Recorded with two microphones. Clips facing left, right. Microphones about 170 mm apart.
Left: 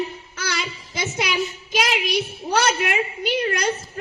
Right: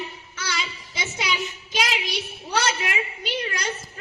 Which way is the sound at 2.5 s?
55° left (ahead or behind).